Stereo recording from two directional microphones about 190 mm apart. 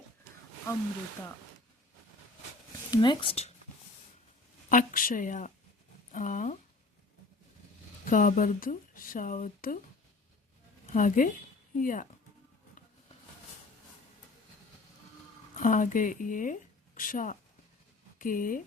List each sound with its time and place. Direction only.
2.9 s speech: 25° left (ahead or behind)
4.7 s speech: 45° left (ahead or behind)
8.0 s speech: 45° left (ahead or behind)
10.9 s speech: 45° left (ahead or behind)
15.5 s speech: 45° left (ahead or behind)